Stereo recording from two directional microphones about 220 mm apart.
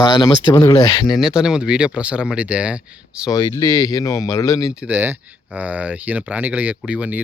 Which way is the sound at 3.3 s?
15° left (ahead or behind).